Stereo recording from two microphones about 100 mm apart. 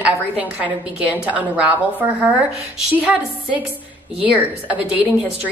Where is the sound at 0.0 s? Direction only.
15° right (ahead or behind).